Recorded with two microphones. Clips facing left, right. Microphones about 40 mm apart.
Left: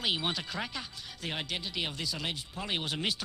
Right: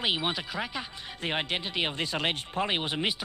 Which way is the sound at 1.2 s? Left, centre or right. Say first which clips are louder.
Right 6 dB; right.